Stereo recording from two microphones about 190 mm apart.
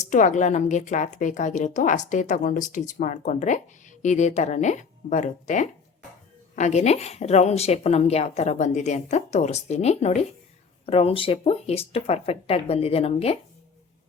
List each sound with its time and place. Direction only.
0.0 s speech: 40° left (ahead or behind)